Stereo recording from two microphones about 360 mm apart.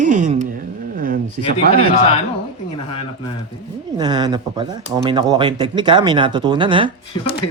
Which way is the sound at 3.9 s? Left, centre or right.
Centre.